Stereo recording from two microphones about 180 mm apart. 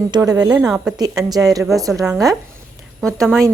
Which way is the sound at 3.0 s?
5° left (ahead or behind).